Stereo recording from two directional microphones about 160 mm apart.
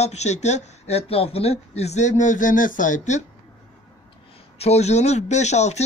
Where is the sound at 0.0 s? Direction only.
45° left (ahead or behind).